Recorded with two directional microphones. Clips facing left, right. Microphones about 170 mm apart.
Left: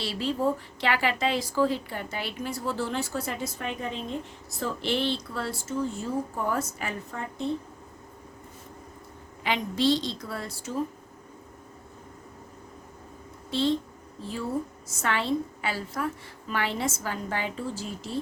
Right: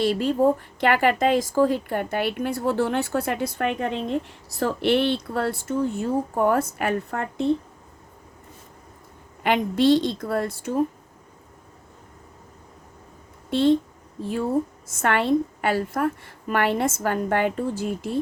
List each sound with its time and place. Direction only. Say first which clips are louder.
0.0 s speech: right 7 dB; 50° right (ahead or behind); by 7.4 s 65° right (ahead or behind)
9.4 s speech: right 6 dB; 55° right (ahead or behind)
13.5 s a woman's voice: right 7 dB; 55° right (ahead or behind)